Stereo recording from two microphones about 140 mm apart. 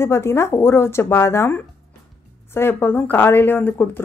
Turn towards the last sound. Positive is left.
turn(degrees=15)  # may be behind; listen again after turning